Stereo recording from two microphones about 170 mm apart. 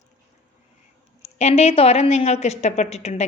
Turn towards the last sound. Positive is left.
turn(degrees=40)  # may be behind; listen again after turning